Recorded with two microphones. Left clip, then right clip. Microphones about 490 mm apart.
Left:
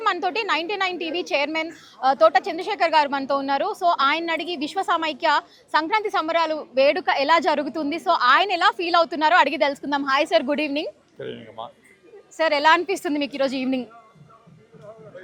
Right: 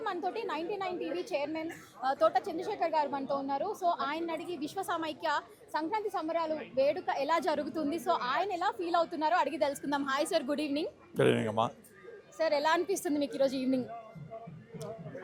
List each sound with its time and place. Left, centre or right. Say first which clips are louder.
0.0 s a woman's voice: left 12 dB; left
11.2 s speech: right 7 dB; right
12.4 s a woman's voice: left 11 dB; left